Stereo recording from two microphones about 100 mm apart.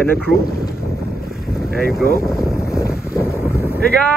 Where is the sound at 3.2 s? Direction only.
25° left (ahead or behind).